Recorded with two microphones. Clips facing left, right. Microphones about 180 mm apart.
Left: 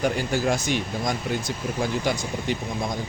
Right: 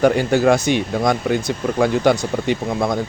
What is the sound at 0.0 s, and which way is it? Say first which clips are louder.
Speech: right 9 dB; 70° right (ahead or behind).